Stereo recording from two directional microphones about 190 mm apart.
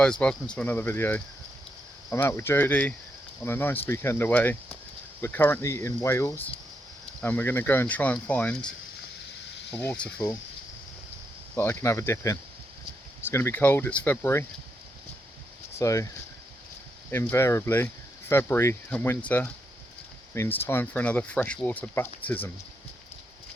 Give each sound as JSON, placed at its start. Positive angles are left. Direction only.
{"t": 0.0, "sound": "speech", "side_deg": 5}
{"t": 9.7, "sound": "speech", "side_deg": 5}
{"t": 11.5, "sound": "speech", "side_deg": 15}
{"t": 15.8, "sound": "speech", "side_deg": 15}
{"t": 17.1, "sound": "speech", "side_deg": 10}